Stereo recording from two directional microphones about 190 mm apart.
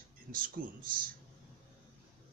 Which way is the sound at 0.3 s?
50° right (ahead or behind).